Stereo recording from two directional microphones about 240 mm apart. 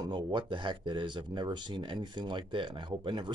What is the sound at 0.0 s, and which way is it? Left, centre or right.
Speech, centre.